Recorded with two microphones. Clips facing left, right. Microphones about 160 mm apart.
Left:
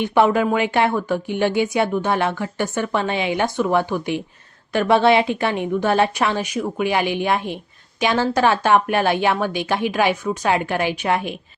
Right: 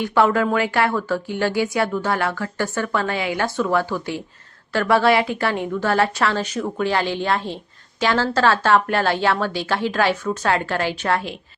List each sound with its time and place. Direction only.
0.0 s a woman's voice: 20° left (ahead or behind)